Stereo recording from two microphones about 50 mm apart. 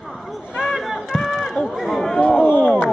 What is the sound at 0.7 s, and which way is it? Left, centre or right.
Speech, centre.